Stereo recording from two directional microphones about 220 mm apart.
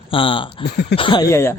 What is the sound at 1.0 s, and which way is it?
Speech, 20° left (ahead or behind).